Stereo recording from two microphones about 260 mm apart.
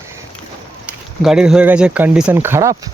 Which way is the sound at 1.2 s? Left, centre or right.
Centre.